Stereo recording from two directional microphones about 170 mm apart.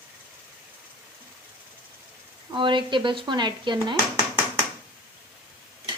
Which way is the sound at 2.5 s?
30° right (ahead or behind).